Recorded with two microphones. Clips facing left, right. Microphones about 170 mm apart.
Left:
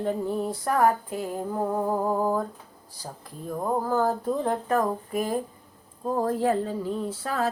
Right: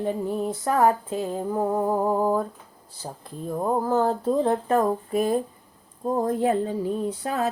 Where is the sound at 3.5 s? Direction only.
20° right (ahead or behind).